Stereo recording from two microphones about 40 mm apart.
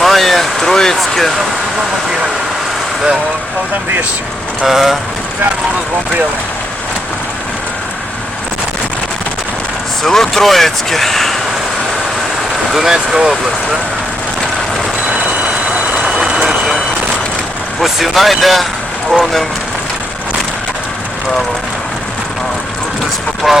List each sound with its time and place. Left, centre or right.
0.0 s a sound: centre
4.6 s speech: centre
10.0 s speech: centre
12.7 s speech: centre
15.0 s train: right
16.0 s vehicle: right
17.7 s speech: centre
23.5 s speech: centre